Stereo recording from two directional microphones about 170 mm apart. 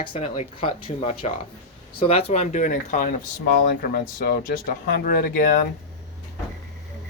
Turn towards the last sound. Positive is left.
turn(degrees=55)  # may be behind; listen again after turning